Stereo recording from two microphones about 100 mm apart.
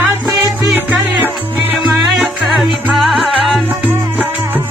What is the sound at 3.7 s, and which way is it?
Music, 15° right (ahead or behind).